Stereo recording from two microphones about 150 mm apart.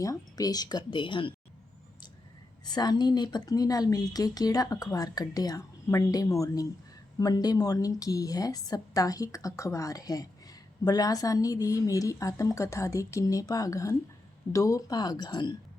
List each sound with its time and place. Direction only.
0.0 s a woman's voice: 25° left (ahead or behind)
2.6 s a woman's voice: 25° left (ahead or behind)